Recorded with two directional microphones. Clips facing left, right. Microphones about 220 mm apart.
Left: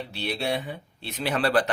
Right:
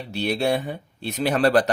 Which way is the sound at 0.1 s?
45° right (ahead or behind).